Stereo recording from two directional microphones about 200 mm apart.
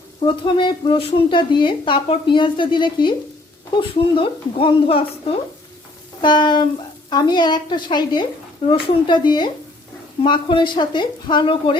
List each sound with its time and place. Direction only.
0.3 s a woman's voice: 25° left (ahead or behind)